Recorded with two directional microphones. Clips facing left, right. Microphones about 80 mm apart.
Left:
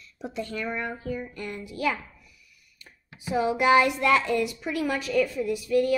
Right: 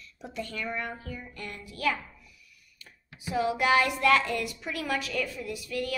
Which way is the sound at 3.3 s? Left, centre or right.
Left.